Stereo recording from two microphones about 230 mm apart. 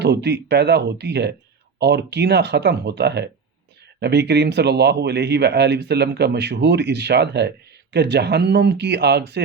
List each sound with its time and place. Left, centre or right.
0.0 s speech: right